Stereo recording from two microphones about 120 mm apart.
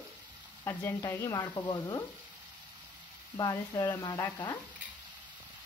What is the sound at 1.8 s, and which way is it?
Speech, 25° left (ahead or behind).